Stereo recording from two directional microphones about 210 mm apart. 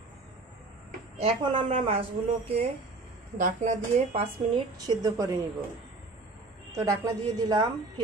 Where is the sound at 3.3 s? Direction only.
35° right (ahead or behind).